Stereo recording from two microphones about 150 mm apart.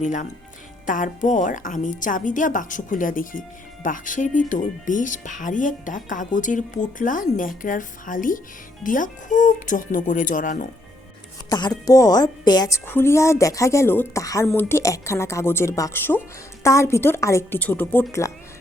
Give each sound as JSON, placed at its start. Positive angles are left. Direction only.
{"t": 0.0, "sound": "speech", "side_deg": 55}
{"t": 11.4, "sound": "a woman's voice", "side_deg": 25}